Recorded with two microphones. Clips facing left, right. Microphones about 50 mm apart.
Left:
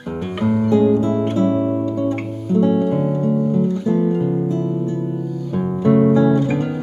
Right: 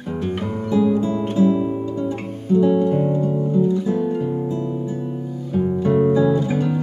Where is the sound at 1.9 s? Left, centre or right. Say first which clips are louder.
Left 4 dB; left.